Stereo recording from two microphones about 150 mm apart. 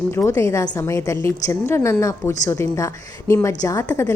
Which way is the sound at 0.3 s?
20° left (ahead or behind).